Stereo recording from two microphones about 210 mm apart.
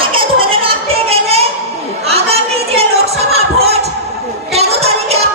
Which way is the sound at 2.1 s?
30° right (ahead or behind).